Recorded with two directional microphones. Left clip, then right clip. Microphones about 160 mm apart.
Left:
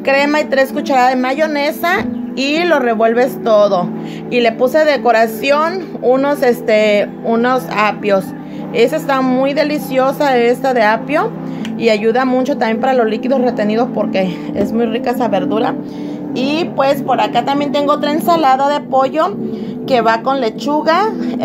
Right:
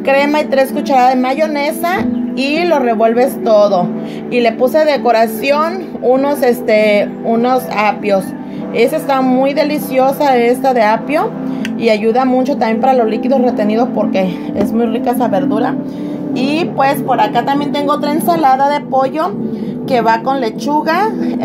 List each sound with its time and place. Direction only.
0.0 s a woman's voice: 5° left (ahead or behind)